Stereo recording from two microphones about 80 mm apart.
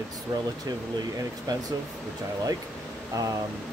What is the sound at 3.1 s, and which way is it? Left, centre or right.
Speech, right.